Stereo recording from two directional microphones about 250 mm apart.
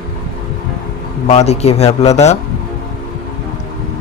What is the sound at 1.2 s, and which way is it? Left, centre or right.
Speech, left.